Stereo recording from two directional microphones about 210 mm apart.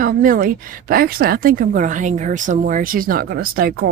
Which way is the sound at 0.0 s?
40° right (ahead or behind).